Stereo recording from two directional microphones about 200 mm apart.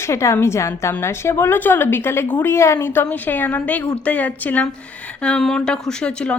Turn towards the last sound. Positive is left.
turn(degrees=5)  # may be behind; listen again after turning